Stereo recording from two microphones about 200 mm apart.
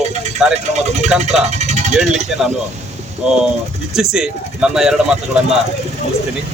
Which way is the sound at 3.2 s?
5° right (ahead or behind).